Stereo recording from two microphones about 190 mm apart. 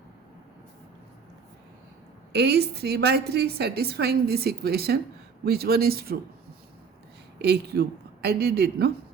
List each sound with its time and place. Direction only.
2.3 s a woman's voice: 60° right (ahead or behind)
7.3 s a woman's voice: 60° right (ahead or behind)